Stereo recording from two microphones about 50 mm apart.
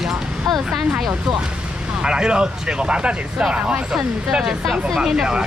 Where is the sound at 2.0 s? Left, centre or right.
Centre.